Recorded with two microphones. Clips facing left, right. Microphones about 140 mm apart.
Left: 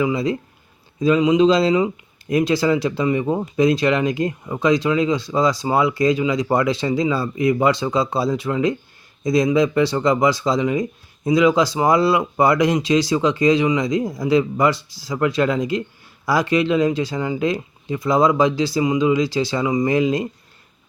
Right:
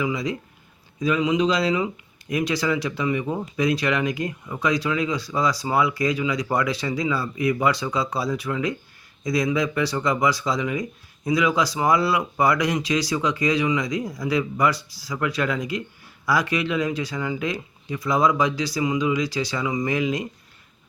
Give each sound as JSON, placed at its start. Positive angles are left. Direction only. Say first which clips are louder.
{"t": 0.0, "sound": "speech", "louder": "left 6 dB", "side_deg": 30}